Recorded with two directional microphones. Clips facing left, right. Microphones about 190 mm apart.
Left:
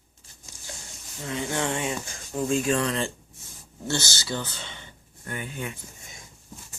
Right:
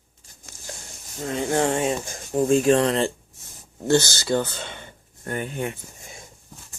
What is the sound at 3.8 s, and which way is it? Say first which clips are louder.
Speech: right 10 dB; 55° right (ahead or behind).